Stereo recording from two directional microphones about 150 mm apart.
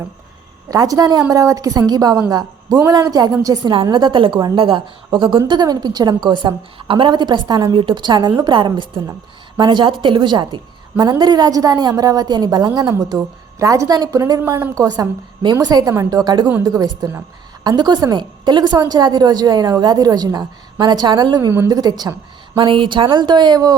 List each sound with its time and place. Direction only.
0.7 s a woman's voice: 25° right (ahead or behind)